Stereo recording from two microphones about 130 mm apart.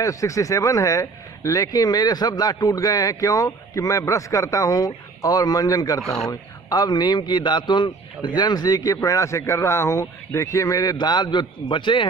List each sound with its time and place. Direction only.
0.0 s speech: 25° left (ahead or behind)
5.9 s speech: 5° left (ahead or behind)
6.7 s a man's voice: 30° left (ahead or behind)